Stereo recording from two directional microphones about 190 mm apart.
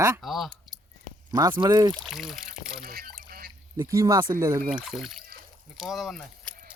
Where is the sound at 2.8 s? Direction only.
50° right (ahead or behind).